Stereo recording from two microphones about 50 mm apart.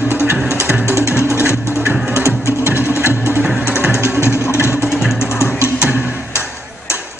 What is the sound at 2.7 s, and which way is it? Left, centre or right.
Music, right.